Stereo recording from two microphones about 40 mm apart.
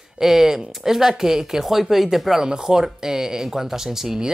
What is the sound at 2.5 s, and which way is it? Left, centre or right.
Speech, centre.